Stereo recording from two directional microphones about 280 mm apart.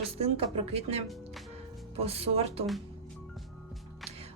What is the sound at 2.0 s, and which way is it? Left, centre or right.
Speech, right.